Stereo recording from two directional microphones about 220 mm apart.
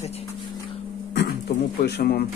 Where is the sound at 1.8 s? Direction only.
45° left (ahead or behind).